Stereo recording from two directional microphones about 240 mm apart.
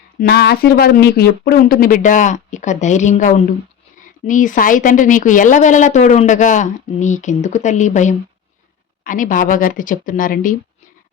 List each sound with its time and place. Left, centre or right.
0.2 s speech: left